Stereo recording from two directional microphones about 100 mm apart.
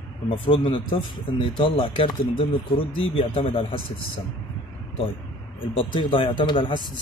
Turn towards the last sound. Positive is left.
turn(degrees=55)  # may be behind; listen again after turning